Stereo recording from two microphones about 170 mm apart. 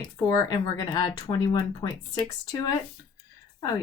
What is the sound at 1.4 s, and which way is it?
Speech, 20° left (ahead or behind).